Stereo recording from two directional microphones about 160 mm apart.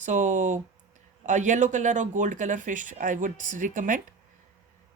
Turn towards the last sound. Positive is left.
turn(degrees=-55)  # may be behind; listen again after turning